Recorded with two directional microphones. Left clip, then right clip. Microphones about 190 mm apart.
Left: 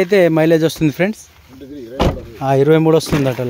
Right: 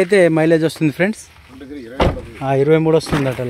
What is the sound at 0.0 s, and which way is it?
Speech, 5° left (ahead or behind).